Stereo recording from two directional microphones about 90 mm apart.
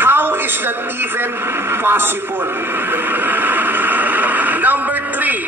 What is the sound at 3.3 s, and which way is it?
Radio, 20° right (ahead or behind).